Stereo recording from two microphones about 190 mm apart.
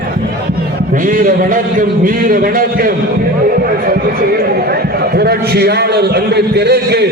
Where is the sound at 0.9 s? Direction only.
45° right (ahead or behind).